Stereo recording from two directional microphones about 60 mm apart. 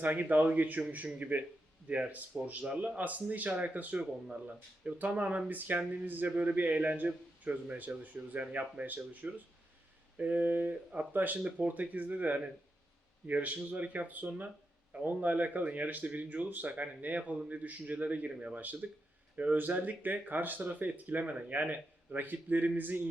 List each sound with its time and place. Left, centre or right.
0.0 s speech: right